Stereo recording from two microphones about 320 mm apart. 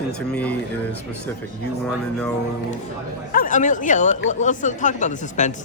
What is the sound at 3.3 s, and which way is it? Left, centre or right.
A woman's voice, left.